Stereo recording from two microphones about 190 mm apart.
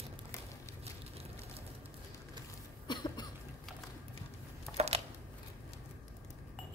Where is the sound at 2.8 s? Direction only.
20° left (ahead or behind).